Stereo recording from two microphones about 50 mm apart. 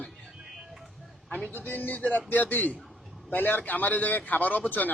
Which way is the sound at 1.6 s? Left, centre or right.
Left.